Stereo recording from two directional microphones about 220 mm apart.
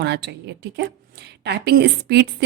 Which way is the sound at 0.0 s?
50° right (ahead or behind).